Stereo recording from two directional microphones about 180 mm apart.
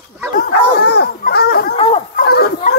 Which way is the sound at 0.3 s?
60° left (ahead or behind).